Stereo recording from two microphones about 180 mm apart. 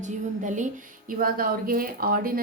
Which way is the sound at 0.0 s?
40° right (ahead or behind).